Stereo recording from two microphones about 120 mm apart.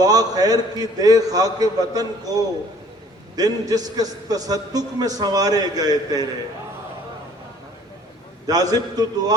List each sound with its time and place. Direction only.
0.0 s a man's voice: 30° right (ahead or behind)
8.4 s a man's voice: 30° right (ahead or behind)